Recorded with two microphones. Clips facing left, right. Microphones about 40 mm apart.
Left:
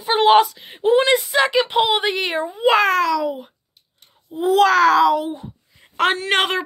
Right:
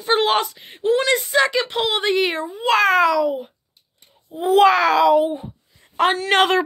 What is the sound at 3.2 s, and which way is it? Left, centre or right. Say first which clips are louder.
Speech: right 3 dB; centre.